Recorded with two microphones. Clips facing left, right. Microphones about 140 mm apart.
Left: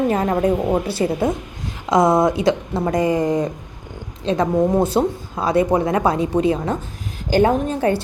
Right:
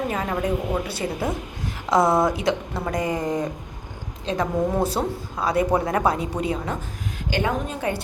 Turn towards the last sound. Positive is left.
turn(degrees=35)  # may be behind; listen again after turning